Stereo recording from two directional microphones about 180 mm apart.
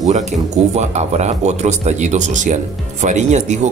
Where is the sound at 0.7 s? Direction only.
40° right (ahead or behind).